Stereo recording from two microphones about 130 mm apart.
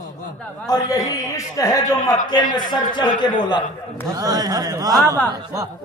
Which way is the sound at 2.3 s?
35° left (ahead or behind).